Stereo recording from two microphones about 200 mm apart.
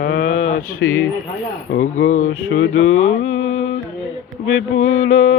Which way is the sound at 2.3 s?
75° left (ahead or behind).